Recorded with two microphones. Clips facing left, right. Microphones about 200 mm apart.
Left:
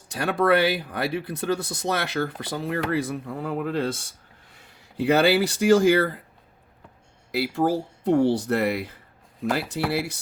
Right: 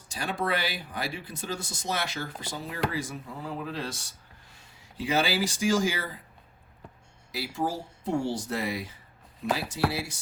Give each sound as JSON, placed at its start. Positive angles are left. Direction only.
{"t": 0.1, "sound": "speech", "side_deg": 60}
{"t": 7.3, "sound": "speech", "side_deg": 65}